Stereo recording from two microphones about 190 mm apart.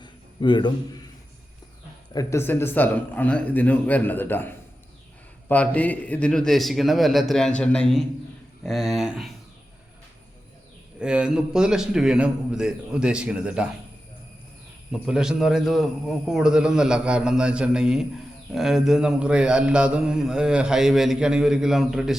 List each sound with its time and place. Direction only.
0.0 s a sound: 25° left (ahead or behind)
2.1 s a man's voice: 15° left (ahead or behind)
11.0 s a man's voice: 5° right (ahead or behind)
14.9 s a man's voice: 5° right (ahead or behind)